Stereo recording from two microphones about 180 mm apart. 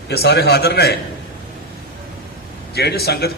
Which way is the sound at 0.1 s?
65° left (ahead or behind).